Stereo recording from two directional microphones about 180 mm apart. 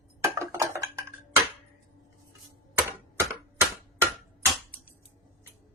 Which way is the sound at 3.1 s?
15° right (ahead or behind).